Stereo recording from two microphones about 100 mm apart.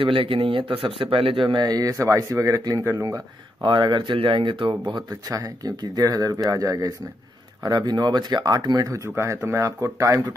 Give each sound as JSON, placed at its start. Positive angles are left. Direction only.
{"t": 0.0, "sound": "speech", "side_deg": -65}
{"t": 3.6, "sound": "speech", "side_deg": -50}
{"t": 8.9, "sound": "speech", "side_deg": -30}